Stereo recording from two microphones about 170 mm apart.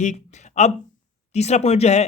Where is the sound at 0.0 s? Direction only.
45° left (ahead or behind).